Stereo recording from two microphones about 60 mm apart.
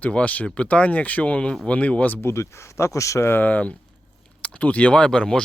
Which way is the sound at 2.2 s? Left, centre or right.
Left.